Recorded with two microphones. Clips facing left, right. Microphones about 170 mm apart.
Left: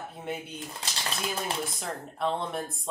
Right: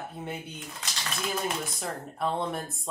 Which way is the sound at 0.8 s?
30° left (ahead or behind).